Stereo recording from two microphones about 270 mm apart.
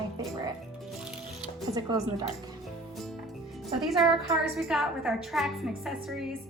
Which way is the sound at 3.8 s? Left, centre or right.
Centre.